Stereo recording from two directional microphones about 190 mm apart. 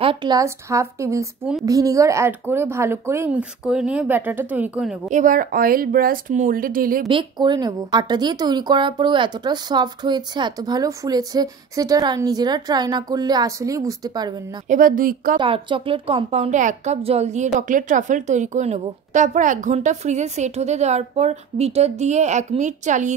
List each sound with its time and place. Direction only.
0.0 s speech: 25° right (ahead or behind); by 5.1 s 5° right (ahead or behind)
5.1 s speech: 45° right (ahead or behind)
7.1 s speech: 25° right (ahead or behind)
14.7 s speech: 45° right (ahead or behind)
15.3 s a woman's voice: 25° right (ahead or behind)